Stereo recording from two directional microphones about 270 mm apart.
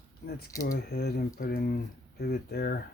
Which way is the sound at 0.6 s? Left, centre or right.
Left.